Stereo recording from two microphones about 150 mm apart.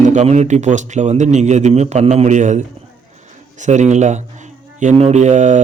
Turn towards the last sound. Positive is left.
turn(degrees=-55)  # may be behind; listen again after turning